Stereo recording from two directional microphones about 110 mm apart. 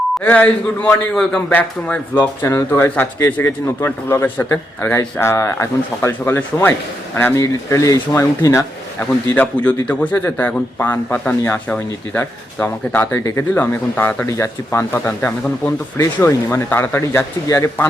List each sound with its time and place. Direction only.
0.2 s a man's voice: 15° left (ahead or behind)
2.4 s a man's voice: 25° left (ahead or behind)
14.3 s speech: 25° left (ahead or behind)